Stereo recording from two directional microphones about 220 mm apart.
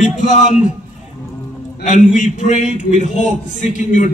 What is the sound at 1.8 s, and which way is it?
A man's voice, 35° left (ahead or behind).